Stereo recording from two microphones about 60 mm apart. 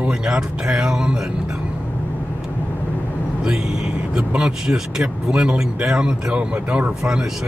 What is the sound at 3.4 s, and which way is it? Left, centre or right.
Speech, centre.